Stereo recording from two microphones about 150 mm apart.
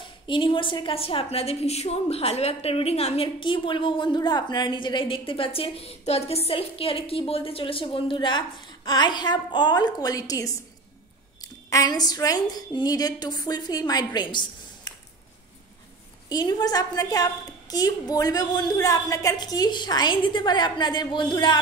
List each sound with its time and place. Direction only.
0.0 s a woman's voice: 35° left (ahead or behind)
16.3 s a woman's voice: 25° left (ahead or behind)